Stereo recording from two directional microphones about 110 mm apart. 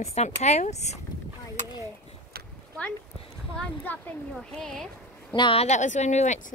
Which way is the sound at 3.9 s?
15° left (ahead or behind).